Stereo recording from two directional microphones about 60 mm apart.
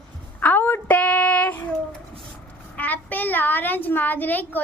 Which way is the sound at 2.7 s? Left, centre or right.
Left.